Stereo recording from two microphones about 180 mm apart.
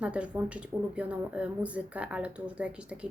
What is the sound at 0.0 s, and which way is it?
A woman's voice, 5° right (ahead or behind).